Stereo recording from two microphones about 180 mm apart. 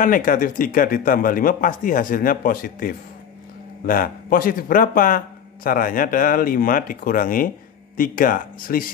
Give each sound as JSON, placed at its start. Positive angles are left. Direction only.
{"t": 0.0, "sound": "speech", "side_deg": 50}